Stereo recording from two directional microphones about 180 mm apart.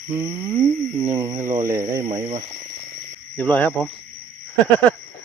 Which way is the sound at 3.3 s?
10° left (ahead or behind).